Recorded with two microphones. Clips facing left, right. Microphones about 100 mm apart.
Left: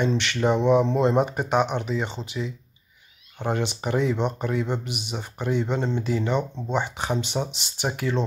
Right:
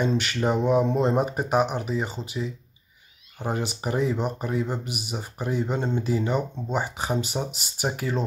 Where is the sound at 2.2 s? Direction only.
40° right (ahead or behind).